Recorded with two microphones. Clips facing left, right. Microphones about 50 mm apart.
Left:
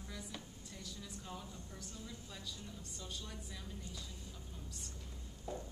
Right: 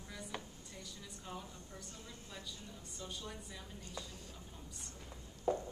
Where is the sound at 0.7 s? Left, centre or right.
Centre.